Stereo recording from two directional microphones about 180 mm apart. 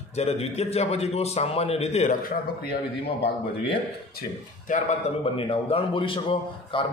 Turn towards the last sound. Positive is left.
turn(degrees=30)  # may be behind; listen again after turning